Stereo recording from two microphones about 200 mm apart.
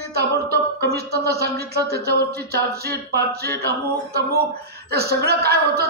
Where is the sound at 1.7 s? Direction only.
50° right (ahead or behind).